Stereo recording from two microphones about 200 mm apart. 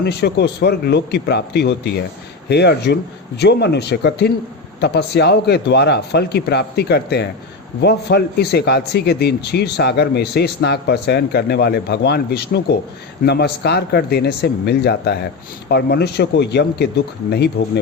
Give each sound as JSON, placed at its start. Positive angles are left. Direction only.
{"t": 0.0, "sound": "speech", "side_deg": 55}